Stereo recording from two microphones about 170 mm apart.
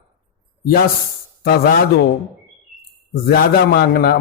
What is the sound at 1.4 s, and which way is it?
Speech, 65° left (ahead or behind).